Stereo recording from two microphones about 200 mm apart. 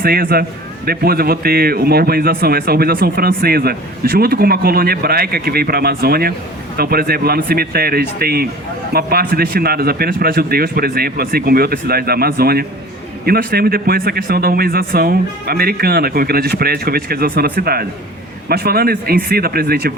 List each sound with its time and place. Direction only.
0.0 s speech: 50° right (ahead or behind)